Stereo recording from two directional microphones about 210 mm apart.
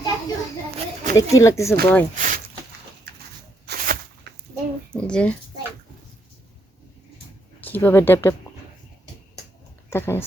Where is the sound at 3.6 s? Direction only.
45° right (ahead or behind).